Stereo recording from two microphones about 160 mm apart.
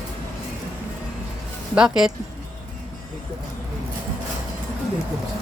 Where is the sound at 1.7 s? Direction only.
5° right (ahead or behind).